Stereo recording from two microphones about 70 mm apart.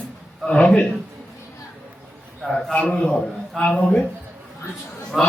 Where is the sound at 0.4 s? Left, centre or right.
Centre.